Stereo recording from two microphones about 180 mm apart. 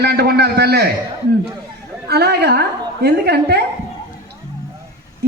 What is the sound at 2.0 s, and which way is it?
A man's voice, 65° right (ahead or behind).